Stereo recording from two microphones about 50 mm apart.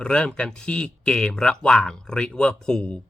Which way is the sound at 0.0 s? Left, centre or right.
Centre.